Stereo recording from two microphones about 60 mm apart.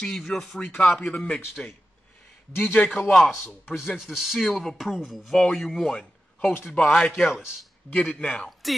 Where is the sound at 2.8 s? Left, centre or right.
Centre.